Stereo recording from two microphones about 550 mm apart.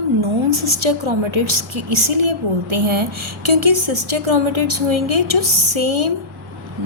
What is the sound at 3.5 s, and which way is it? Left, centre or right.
A woman's voice, right.